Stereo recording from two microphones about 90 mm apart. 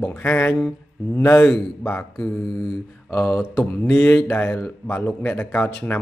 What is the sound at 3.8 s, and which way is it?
A man's voice, 20° left (ahead or behind).